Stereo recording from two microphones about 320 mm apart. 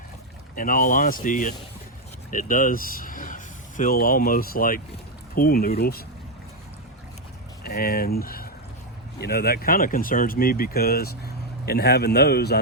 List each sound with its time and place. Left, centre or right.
0.5 s speech: left
7.6 s speech: left